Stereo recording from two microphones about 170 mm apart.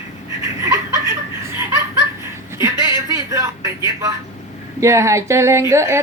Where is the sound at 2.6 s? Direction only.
20° right (ahead or behind).